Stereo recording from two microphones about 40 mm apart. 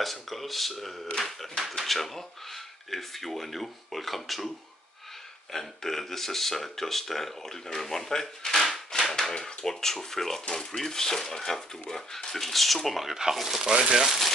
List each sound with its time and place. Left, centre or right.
0.0 s speech: centre
5.5 s speech: centre
8.6 s a sound: centre
9.3 s speech: centre
10.5 s speech: centre